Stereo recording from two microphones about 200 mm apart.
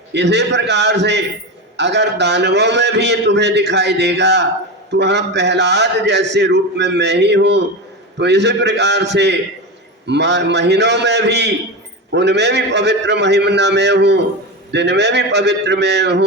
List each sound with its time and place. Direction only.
0.1 s a man's voice: 60° right (ahead or behind)